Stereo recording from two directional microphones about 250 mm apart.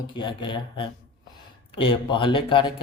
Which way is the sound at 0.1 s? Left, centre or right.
Centre.